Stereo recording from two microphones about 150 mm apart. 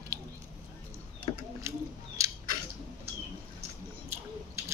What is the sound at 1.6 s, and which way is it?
Scissors, 20° right (ahead or behind).